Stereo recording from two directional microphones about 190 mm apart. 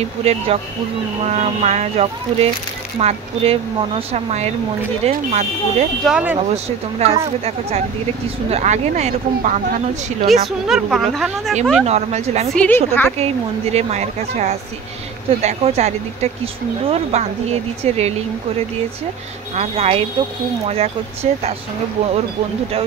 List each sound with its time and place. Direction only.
0.2 s speech: 35° right (ahead or behind)
6.0 s speech: 5° right (ahead or behind)
6.5 s speech: 35° right (ahead or behind)
10.2 s speech: centre (ahead or behind)
11.8 s speech: 35° right (ahead or behind)
12.4 s a woman's voice: 5° left (ahead or behind)
13.2 s speech: 35° right (ahead or behind)
19.5 s speech: 35° right (ahead or behind)